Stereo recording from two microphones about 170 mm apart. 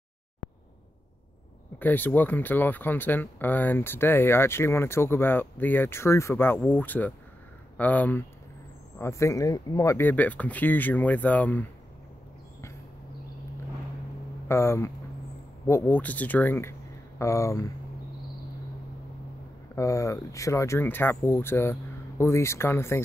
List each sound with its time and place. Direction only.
1.8 s speech: 10° left (ahead or behind)
14.5 s speech: 15° left (ahead or behind)
19.7 s speech: 20° left (ahead or behind)